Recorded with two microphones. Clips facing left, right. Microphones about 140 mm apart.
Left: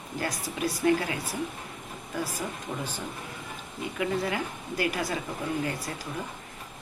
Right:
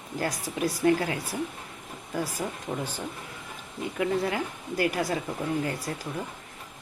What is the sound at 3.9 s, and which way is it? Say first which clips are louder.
Speech: right 2 dB; 40° right (ahead or behind).